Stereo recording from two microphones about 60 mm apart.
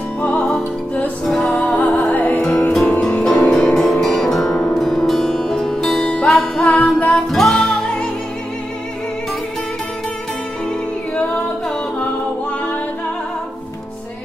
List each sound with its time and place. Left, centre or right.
0.2 s music: centre
1.2 s music: centre
1.5 s music: centre
2.7 s music: centre
6.7 s music: left
7.2 s music: centre